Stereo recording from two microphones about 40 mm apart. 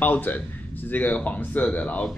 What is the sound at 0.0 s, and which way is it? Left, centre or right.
A man's voice, left.